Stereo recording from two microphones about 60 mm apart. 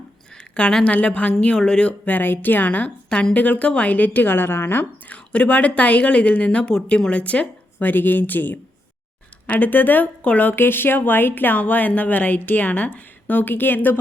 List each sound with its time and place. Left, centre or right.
0.3 s a sound: centre
0.9 s a woman's voice: left
2.1 s a woman's voice: left
5.1 s a woman's voice: left
10.5 s speech: left